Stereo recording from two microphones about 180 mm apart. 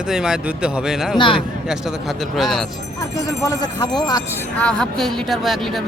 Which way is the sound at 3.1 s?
20° left (ahead or behind).